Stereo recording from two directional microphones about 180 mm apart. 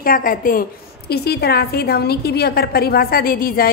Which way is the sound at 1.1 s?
60° left (ahead or behind).